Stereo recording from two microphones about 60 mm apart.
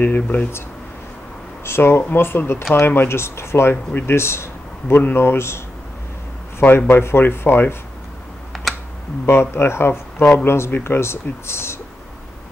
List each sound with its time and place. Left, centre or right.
0.0 s speech: left
1.6 s speech: left
6.9 s speech: left
9.2 s speech: left